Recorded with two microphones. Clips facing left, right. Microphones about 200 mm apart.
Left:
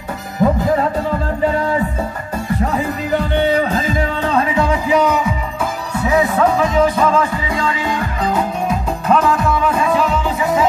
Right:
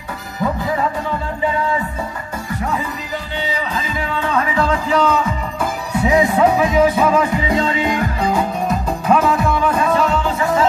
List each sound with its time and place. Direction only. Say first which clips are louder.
0.4 s music: left 5 dB; 45° left (ahead or behind)
3.1 s music: left 13 dB; 60° left (ahead or behind); by 5.3 s 15° left (ahead or behind)
6.0 s music: right 1 dB; 15° right (ahead or behind)
8.3 s music: left 2 dB; centre (ahead or behind)